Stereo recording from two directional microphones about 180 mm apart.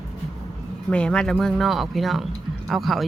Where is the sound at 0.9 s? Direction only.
5° left (ahead or behind).